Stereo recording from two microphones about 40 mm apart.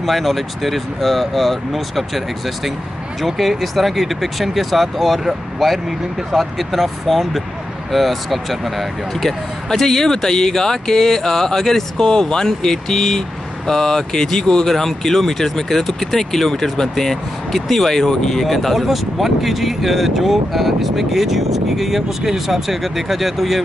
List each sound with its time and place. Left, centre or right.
0.0 s speech: centre
18.4 s speech: centre